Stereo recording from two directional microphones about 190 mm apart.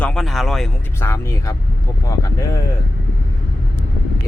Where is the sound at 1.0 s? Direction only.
15° left (ahead or behind).